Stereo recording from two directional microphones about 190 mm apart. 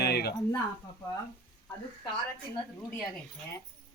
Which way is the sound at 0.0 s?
60° left (ahead or behind).